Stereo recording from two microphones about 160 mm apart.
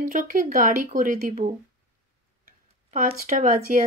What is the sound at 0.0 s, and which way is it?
Speech, 60° right (ahead or behind).